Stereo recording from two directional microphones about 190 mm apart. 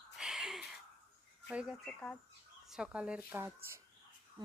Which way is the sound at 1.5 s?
5° right (ahead or behind).